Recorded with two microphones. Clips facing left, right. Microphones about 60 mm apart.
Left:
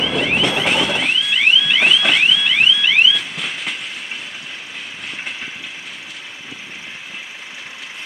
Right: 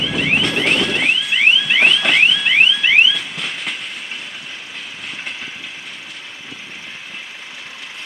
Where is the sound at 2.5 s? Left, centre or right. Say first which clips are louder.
Right 2 dB; right.